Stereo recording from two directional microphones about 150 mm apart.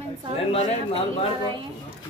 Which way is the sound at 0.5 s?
45° left (ahead or behind).